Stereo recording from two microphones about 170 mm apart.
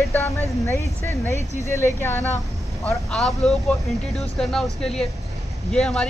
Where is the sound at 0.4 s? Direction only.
15° left (ahead or behind).